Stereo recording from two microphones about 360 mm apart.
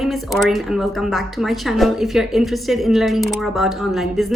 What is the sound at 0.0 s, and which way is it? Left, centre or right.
A woman's voice, centre.